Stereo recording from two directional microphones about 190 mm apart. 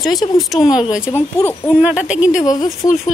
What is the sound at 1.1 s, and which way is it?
Speech, 15° left (ahead or behind).